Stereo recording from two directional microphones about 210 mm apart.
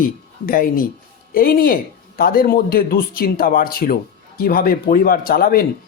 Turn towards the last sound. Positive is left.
turn(degrees=45)  # may be behind; listen again after turning